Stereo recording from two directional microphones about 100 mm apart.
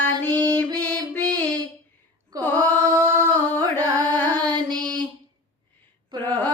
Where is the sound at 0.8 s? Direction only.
15° left (ahead or behind).